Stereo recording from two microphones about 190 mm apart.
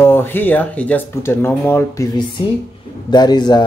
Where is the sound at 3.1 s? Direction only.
20° left (ahead or behind).